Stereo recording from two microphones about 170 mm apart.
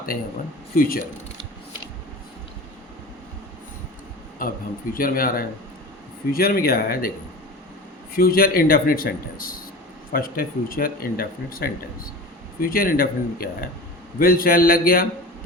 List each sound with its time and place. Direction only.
0.7 s speech: 55° left (ahead or behind)
4.4 s speech: 55° left (ahead or behind)
8.1 s speech: 60° left (ahead or behind)